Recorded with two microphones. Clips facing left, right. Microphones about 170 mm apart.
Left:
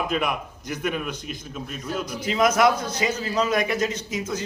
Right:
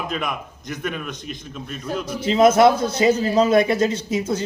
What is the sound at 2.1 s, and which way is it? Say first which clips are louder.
A man's voice: right 7 dB; 25° right (ahead or behind).